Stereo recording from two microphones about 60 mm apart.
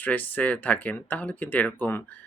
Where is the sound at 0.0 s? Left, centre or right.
Left.